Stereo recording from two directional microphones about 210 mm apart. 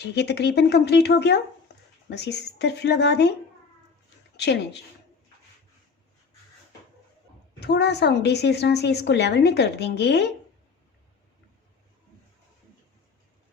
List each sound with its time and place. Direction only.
0.0 s a woman's voice: 50° left (ahead or behind)
1.7 s dog: 50° left (ahead or behind)
2.0 s a woman's voice: 55° left (ahead or behind)
4.4 s speech: 55° left (ahead or behind)
7.6 s a woman's voice: 50° left (ahead or behind)